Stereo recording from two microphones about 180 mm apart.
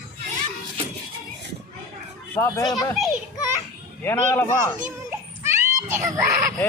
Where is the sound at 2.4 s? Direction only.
20° left (ahead or behind).